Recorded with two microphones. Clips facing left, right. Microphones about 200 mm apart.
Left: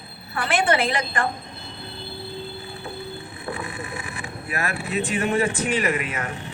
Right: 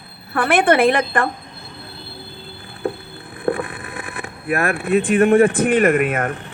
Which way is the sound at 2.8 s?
55° right (ahead or behind).